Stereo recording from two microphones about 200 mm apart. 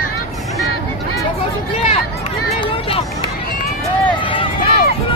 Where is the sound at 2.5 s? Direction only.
25° left (ahead or behind).